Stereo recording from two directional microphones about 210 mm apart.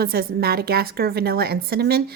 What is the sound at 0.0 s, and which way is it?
A woman's voice, 45° right (ahead or behind).